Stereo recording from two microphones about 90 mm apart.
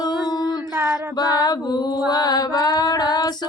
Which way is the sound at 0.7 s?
25° right (ahead or behind).